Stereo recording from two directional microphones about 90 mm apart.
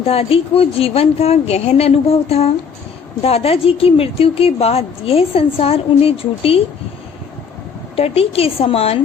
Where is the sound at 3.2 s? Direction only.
90° left.